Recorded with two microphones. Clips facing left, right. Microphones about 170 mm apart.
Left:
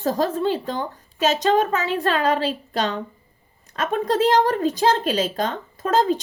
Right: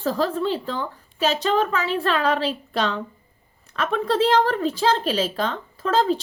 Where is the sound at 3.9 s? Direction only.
45° left (ahead or behind).